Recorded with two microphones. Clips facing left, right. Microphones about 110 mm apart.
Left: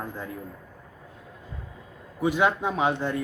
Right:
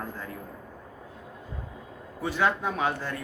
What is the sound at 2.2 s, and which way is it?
Speech, 15° left (ahead or behind).